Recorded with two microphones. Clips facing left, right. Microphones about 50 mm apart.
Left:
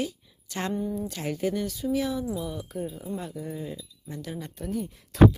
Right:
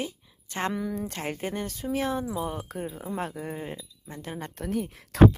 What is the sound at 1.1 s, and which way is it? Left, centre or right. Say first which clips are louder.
Speech: left 3 dB; right.